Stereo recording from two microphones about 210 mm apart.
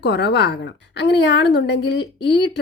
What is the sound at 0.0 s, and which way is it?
A woman's voice, 55° left (ahead or behind).